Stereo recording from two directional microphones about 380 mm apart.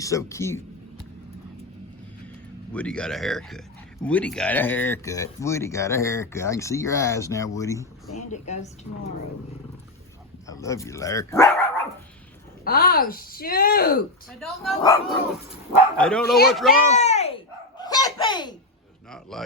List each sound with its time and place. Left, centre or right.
0.0 s speech: centre
2.7 s speech: centre
10.4 s speech: centre
12.6 s speech: left
14.3 s speech: centre
16.3 s speech: left
16.9 s dog: centre
19.1 s speech: centre